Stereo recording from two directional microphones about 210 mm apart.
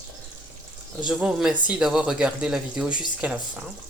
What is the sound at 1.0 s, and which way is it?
Speech, 5° right (ahead or behind).